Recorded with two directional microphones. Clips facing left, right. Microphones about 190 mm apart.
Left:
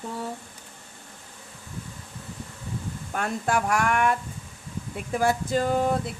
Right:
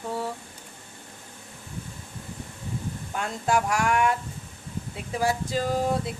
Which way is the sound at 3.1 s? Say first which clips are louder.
Even; 55° left (ahead or behind).